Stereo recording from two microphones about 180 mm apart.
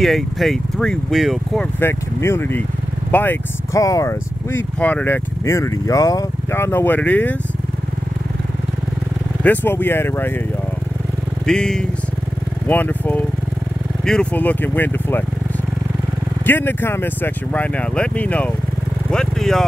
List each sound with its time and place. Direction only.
0.0 s speech: centre (ahead or behind)
1.8 s speech: 15° left (ahead or behind)
9.4 s speech: 10° left (ahead or behind)
11.4 s speech: 5° left (ahead or behind)
16.4 s speech: 10° left (ahead or behind)
19.0 s vehicle: 5° left (ahead or behind)